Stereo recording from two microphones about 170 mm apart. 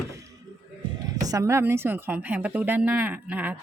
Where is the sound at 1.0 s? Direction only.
20° right (ahead or behind).